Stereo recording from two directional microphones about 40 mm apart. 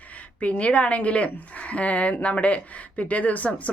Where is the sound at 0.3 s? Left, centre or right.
Left.